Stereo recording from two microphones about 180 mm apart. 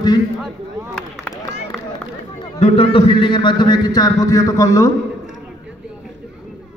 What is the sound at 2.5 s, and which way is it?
A man's voice, 35° left (ahead or behind).